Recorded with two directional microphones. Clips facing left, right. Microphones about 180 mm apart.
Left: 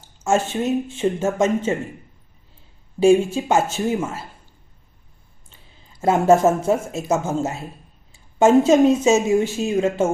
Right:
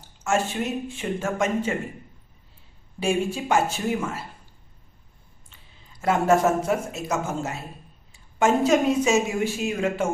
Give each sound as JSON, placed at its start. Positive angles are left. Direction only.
{"t": 0.5, "sound": "a woman's voice", "side_deg": 25}
{"t": 3.0, "sound": "a woman's voice", "side_deg": 25}
{"t": 6.0, "sound": "a woman's voice", "side_deg": 25}